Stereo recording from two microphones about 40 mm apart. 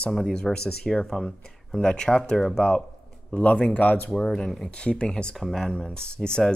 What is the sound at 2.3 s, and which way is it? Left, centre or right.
Speech, centre.